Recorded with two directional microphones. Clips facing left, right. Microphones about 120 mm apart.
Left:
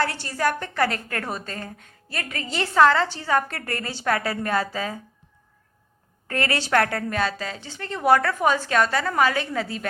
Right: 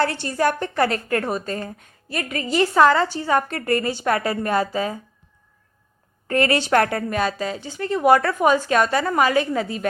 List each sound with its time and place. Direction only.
0.0 s a woman's voice: 25° right (ahead or behind)
6.2 s a woman's voice: 20° right (ahead or behind)
7.1 s a woman's voice: 15° right (ahead or behind)